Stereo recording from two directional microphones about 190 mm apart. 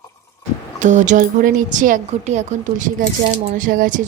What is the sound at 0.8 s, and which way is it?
A woman's voice, 40° right (ahead or behind).